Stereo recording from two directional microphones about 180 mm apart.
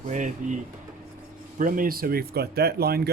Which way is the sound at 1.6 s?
50° right (ahead or behind).